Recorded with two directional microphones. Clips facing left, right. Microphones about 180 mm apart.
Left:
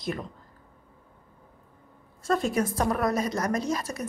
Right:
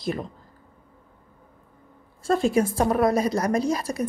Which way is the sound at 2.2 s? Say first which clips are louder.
Right 4 dB; 30° right (ahead or behind).